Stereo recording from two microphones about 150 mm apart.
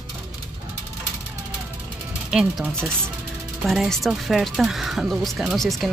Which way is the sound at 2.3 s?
5° right (ahead or behind).